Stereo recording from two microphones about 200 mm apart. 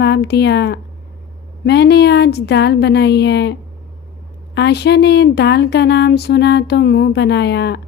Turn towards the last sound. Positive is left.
turn(degrees=60)  # may be behind; listen again after turning